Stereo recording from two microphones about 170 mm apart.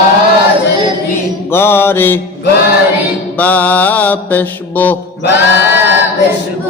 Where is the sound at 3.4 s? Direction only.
10° left (ahead or behind).